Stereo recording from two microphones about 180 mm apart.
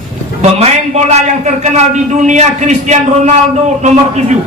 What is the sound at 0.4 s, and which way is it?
A man's voice, 35° right (ahead or behind).